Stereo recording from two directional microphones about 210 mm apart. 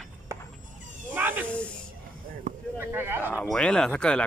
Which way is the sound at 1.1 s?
10° right (ahead or behind).